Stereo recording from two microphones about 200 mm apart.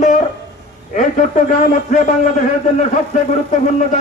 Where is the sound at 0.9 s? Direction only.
40° left (ahead or behind).